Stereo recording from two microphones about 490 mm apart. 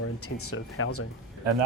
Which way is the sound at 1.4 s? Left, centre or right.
Right.